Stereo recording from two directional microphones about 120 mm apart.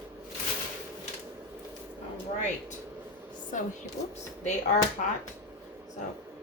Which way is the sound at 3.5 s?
90° left.